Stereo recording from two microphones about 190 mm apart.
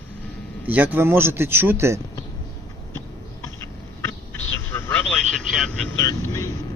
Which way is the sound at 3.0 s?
15° left (ahead or behind).